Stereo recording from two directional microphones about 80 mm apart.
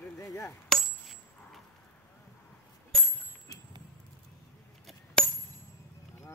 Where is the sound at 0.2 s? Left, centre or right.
Left.